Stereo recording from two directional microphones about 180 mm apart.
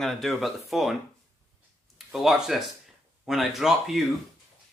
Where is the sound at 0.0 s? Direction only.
Centre (ahead or behind).